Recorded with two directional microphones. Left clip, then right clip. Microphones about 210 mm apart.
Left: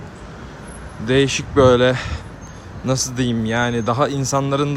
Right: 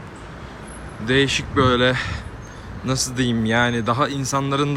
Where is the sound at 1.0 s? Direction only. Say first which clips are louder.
Left 1 dB; 20° left (ahead or behind).